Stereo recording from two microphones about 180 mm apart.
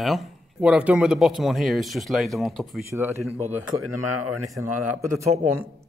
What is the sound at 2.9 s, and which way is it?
Speech, 15° right (ahead or behind).